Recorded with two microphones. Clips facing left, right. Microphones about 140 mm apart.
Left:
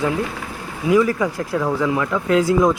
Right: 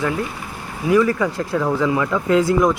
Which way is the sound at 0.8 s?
10° left (ahead or behind).